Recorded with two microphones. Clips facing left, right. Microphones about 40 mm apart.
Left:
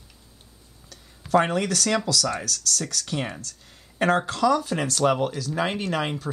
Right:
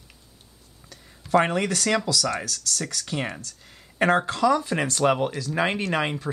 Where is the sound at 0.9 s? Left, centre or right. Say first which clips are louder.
Even; centre.